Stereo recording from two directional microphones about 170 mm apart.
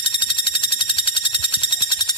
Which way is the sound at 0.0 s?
30° left (ahead or behind).